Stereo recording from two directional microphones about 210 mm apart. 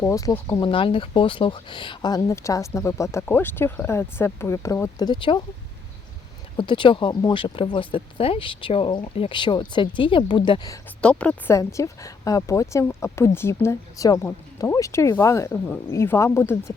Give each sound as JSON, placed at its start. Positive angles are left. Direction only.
{"t": 0.0, "sound": "speech", "side_deg": 15}
{"t": 6.6, "sound": "speech", "side_deg": 25}
{"t": 11.0, "sound": "speech", "side_deg": 5}